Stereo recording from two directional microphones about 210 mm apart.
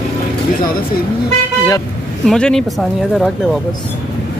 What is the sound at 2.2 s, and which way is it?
Speech, 5° left (ahead or behind).